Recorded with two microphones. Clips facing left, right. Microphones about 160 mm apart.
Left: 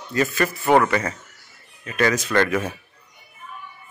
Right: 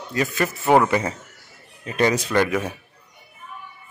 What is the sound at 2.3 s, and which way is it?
Speech, 10° right (ahead or behind).